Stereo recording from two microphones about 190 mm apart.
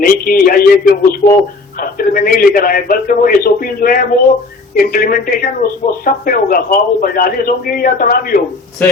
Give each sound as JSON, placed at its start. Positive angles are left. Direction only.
{"t": 0.0, "sound": "speech", "side_deg": 50}
{"t": 8.8, "sound": "speech", "side_deg": 5}